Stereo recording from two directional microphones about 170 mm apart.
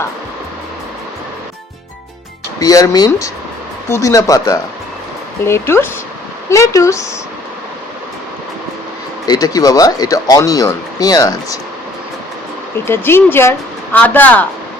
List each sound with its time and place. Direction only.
2.6 s speech: 20° left (ahead or behind)
9.2 s speech: 25° left (ahead or behind)
12.9 s speech: 15° left (ahead or behind)